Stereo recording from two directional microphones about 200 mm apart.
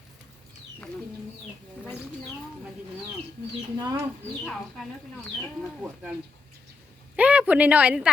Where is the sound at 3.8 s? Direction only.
15° right (ahead or behind).